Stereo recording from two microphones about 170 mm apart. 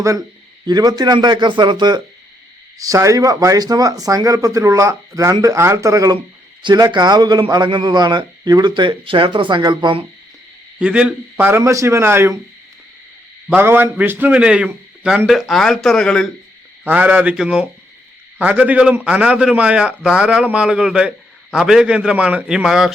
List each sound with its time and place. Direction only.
0.0 s a man's voice: 20° right (ahead or behind)
10.8 s a man's voice: 5° right (ahead or behind)
13.5 s a man's voice: 10° right (ahead or behind); by 16.2 s 5° left (ahead or behind)
16.8 s a man's voice: 10° right (ahead or behind)